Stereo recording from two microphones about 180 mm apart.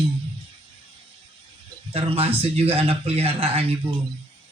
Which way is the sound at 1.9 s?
30° right (ahead or behind).